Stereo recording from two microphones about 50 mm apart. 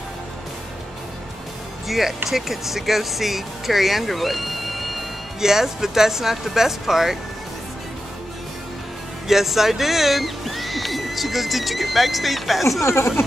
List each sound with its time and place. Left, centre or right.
1.9 s speech: centre
9.3 s speech: centre
12.8 s speech: left